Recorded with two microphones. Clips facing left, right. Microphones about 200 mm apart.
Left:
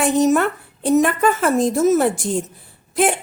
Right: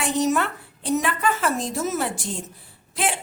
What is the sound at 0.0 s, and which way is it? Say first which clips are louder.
Speech: left 7 dB; 50° left (ahead or behind).